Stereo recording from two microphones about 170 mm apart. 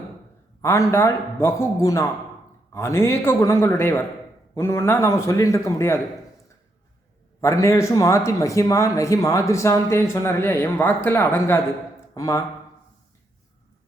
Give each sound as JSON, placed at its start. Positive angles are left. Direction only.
{"t": 0.6, "sound": "speech", "side_deg": 15}
{"t": 7.4, "sound": "speech", "side_deg": 15}